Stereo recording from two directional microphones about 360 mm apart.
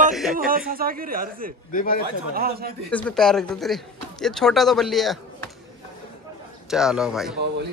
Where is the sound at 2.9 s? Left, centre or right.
Centre.